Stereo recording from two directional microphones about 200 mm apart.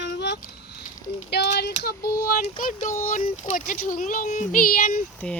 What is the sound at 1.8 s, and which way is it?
Child singing, 50° left (ahead or behind).